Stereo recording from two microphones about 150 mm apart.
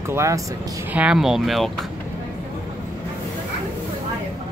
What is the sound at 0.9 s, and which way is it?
Speech, 5° right (ahead or behind).